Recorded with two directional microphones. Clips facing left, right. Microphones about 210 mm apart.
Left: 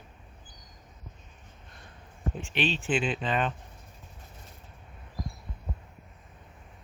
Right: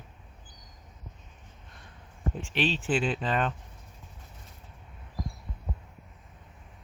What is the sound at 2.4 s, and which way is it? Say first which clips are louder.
Speech: right 1 dB; 35° right (ahead or behind).